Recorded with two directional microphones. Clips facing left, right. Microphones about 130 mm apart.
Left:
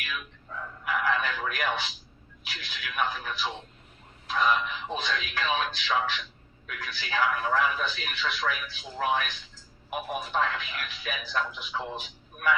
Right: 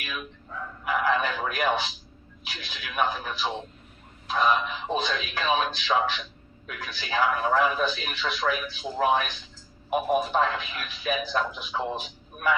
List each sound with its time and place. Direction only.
0.0 s chicken: 25° right (ahead or behind)
0.9 s a sound: 25° right (ahead or behind)
2.4 s a man's voice: 20° right (ahead or behind)